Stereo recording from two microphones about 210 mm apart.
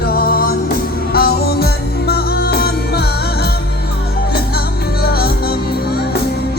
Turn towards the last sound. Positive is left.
turn(degrees=45)  # may be behind; listen again after turning